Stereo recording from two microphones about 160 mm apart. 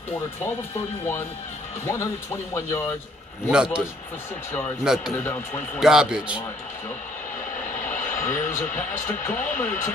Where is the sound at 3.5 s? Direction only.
5° right (ahead or behind).